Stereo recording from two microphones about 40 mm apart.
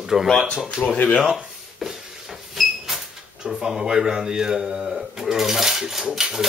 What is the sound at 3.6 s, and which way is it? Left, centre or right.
Speech, centre.